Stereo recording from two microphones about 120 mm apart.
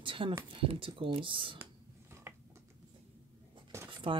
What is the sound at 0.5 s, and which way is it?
Speech, 45° right (ahead or behind).